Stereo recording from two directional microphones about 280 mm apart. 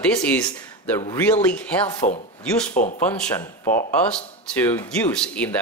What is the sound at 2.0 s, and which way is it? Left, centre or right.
Speech, left.